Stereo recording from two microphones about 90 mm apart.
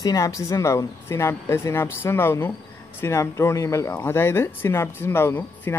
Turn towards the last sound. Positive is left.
turn(degrees=25)  # may be behind; listen again after turning